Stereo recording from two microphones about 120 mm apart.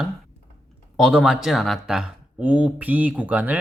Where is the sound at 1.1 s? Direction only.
5° right (ahead or behind).